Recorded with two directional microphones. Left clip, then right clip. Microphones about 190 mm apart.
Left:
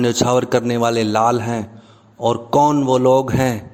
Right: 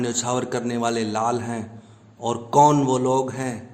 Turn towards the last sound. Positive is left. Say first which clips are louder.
# left 8 dB
turn(degrees=40)  # may be behind; listen again after turning